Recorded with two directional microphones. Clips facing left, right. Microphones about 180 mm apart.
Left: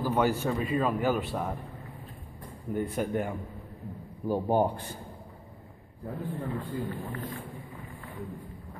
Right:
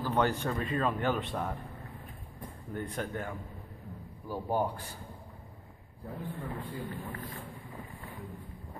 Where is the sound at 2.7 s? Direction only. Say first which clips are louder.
Left 7 dB; 10° left (ahead or behind).